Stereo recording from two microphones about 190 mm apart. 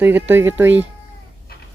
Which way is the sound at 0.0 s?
10° right (ahead or behind).